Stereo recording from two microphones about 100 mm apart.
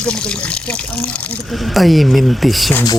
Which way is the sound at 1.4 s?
Centre (ahead or behind).